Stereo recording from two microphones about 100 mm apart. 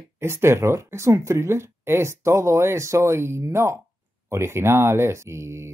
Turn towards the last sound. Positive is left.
turn(degrees=-25)  # may be behind; listen again after turning